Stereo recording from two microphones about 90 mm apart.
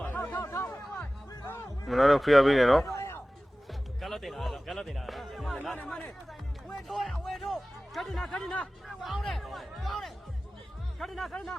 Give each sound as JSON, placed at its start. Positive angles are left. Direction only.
{"t": 0.0, "sound": "music", "side_deg": 25}
{"t": 1.5, "sound": "cattle", "side_deg": 30}
{"t": 1.9, "sound": "speech", "side_deg": 0}
{"t": 2.8, "sound": "a sound", "side_deg": 35}
{"t": 3.7, "sound": "music", "side_deg": 0}
{"t": 5.7, "sound": "speech", "side_deg": 15}
{"t": 6.7, "sound": "speech", "side_deg": 0}